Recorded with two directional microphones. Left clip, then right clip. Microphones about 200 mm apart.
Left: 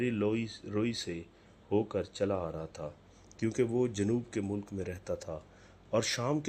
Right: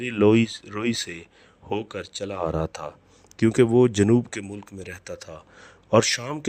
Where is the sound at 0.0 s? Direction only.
40° right (ahead or behind).